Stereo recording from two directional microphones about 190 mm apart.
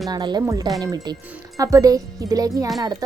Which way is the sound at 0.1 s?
20° right (ahead or behind).